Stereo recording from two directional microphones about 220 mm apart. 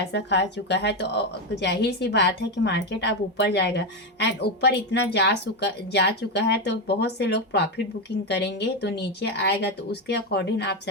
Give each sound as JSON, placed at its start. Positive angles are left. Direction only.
{"t": 0.0, "sound": "a woman's voice", "side_deg": 50}